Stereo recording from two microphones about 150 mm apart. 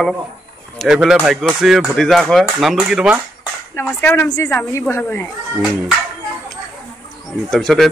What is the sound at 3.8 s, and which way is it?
Speech, 15° left (ahead or behind).